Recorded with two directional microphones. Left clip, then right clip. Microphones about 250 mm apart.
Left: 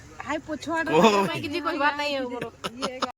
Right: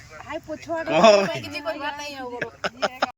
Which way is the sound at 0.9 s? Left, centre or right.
Centre.